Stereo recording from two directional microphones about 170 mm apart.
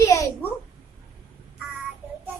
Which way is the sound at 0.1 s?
20° left (ahead or behind).